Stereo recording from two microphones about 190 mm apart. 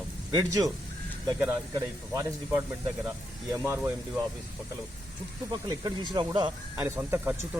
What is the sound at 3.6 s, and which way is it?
Speech, 10° right (ahead or behind).